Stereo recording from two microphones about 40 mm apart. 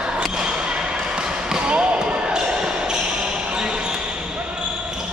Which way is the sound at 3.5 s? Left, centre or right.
Right.